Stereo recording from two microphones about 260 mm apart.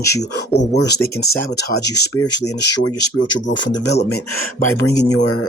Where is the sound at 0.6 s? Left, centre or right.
Left.